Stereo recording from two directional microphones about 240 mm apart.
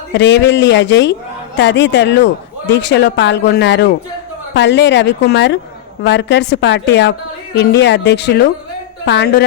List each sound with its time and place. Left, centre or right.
0.1 s speech: left